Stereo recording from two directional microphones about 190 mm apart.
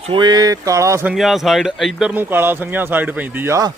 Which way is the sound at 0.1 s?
20° right (ahead or behind).